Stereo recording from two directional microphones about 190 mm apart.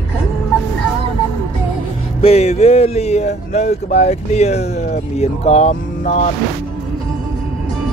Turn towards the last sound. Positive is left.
turn(degrees=40)  # may be behind; listen again after turning